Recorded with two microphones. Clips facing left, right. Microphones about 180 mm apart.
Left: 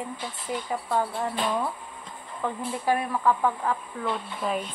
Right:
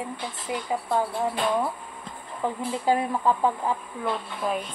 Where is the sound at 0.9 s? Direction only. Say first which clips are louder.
Right 1 dB; 10° right (ahead or behind).